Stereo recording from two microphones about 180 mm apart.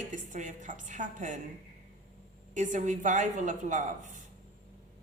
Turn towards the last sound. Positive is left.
turn(degrees=-45)  # may be behind; listen again after turning